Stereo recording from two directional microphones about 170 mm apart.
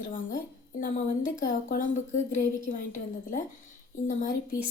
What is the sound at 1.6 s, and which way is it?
Speech, 50° left (ahead or behind).